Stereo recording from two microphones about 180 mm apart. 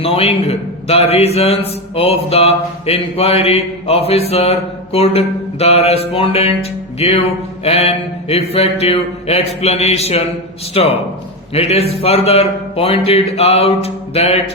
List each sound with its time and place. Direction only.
0.0 s a man's voice: 35° left (ahead or behind)